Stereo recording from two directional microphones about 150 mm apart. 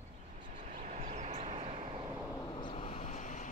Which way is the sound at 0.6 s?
65° right (ahead or behind).